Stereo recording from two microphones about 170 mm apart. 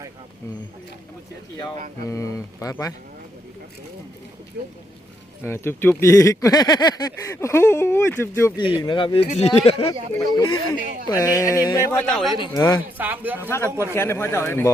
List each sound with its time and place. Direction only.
2.0 s speech: 20° left (ahead or behind)
5.4 s speech: 15° left (ahead or behind)
8.8 s speech: 30° left (ahead or behind)
10.2 s a sound: 25° left (ahead or behind)
11.9 s speech: 10° left (ahead or behind)
12.4 s a sound: 20° left (ahead or behind)
13.0 s speech: 10° right (ahead or behind)
13.9 s speech: 15° left (ahead or behind)